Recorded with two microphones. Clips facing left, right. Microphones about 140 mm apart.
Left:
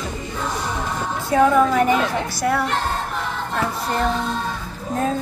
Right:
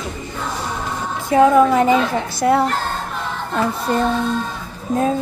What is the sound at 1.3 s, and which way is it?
Speech, 20° right (ahead or behind).